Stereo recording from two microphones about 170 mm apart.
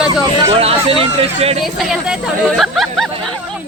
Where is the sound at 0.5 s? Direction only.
35° right (ahead or behind).